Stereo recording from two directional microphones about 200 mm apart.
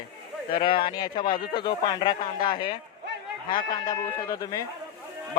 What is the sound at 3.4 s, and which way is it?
Speech, 20° left (ahead or behind).